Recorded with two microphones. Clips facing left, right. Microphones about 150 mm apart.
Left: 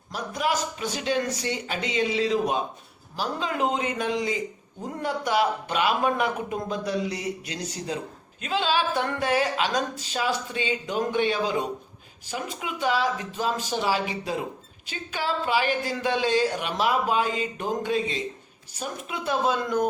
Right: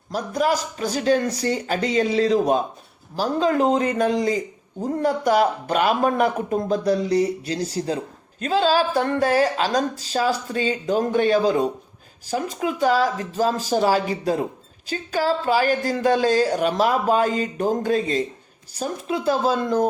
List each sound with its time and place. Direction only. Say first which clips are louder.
0.1 s speech: right 5 dB; 40° right (ahead or behind)